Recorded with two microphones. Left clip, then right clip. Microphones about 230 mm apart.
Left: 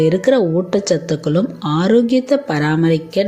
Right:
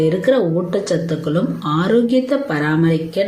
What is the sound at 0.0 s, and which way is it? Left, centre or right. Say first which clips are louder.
Speech: left 2 dB; left.